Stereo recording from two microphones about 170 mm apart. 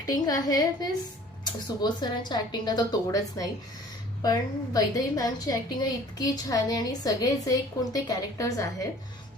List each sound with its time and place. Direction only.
0.0 s a woman's voice: 20° left (ahead or behind)